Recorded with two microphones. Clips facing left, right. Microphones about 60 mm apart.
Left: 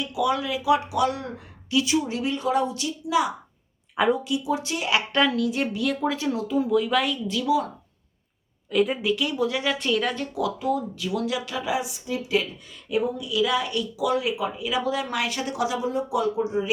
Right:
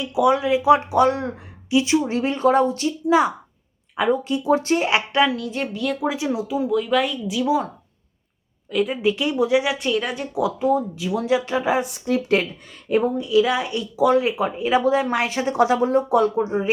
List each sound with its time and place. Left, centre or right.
0.0 s speech: right
3.9 s speech: centre
4.2 s speech: right
5.1 s speech: centre
6.0 s speech: centre
6.6 s speech: centre
7.4 s speech: right
8.7 s speech: centre
9.0 s speech: right
9.7 s speech: centre
10.3 s speech: right
11.8 s speech: right
13.2 s speech: right
15.6 s speech: right